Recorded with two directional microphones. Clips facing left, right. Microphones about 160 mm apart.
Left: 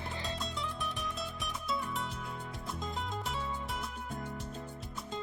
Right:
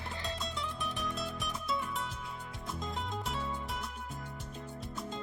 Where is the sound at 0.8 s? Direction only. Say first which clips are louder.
Right 1 dB; centre (ahead or behind).